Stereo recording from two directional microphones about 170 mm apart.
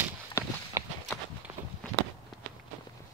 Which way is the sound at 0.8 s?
20° right (ahead or behind).